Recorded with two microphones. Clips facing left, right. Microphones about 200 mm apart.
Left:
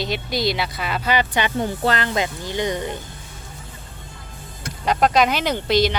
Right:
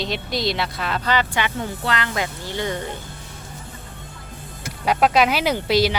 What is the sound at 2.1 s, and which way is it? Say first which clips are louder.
Speech: left 3 dB; 20° left (ahead or behind).